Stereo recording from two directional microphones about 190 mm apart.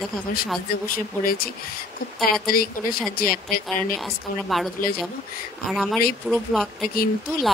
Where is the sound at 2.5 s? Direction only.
50° left (ahead or behind).